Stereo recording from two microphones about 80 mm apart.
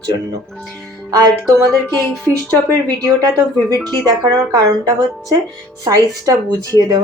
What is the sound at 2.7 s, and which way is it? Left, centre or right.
Speech, right.